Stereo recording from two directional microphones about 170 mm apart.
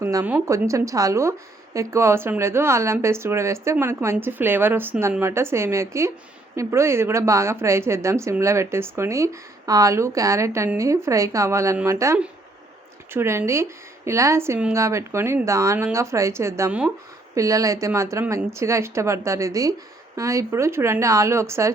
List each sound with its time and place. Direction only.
0.0 s speech: 15° right (ahead or behind)